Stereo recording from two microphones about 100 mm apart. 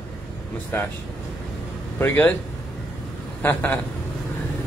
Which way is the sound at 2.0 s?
20° left (ahead or behind).